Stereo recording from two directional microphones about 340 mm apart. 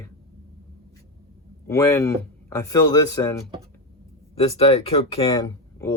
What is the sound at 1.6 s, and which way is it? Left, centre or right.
Speech, centre.